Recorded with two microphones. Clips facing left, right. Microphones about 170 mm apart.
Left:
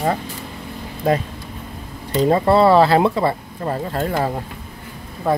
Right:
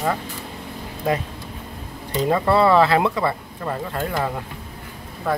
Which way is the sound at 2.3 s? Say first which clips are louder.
Left 3 dB; 30° left (ahead or behind).